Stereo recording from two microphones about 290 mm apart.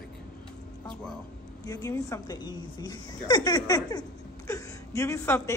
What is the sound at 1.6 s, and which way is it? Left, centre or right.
A woman's voice, centre.